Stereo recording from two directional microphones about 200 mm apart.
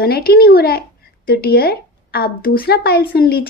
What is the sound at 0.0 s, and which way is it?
Speech, 50° left (ahead or behind).